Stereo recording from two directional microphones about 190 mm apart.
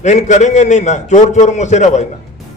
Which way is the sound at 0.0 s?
40° left (ahead or behind).